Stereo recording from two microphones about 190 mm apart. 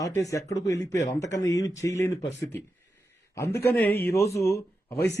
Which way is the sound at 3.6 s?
10° left (ahead or behind).